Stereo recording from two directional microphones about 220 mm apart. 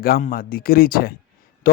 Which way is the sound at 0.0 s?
40° left (ahead or behind).